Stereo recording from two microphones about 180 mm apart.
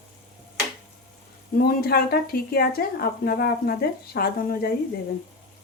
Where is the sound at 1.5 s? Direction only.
60° left (ahead or behind).